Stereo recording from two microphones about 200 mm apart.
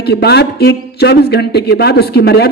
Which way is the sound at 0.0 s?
55° left (ahead or behind).